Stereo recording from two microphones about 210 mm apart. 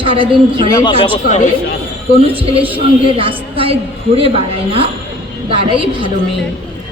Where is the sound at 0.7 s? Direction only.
15° left (ahead or behind).